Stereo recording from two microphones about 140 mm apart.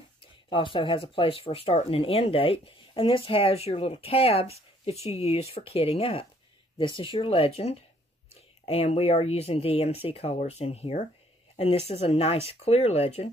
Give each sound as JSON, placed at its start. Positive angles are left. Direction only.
{"t": 0.5, "sound": "a woman's voice", "side_deg": 35}